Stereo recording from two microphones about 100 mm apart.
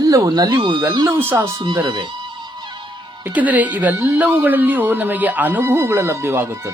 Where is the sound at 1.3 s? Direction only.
30° right (ahead or behind).